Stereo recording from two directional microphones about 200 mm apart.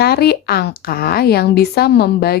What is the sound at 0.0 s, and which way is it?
A woman's voice, 50° left (ahead or behind).